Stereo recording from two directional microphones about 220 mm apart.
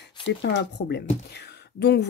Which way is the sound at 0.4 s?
50° left (ahead or behind).